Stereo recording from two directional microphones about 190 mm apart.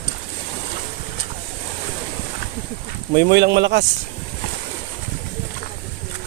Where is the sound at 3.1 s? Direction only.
60° right (ahead or behind).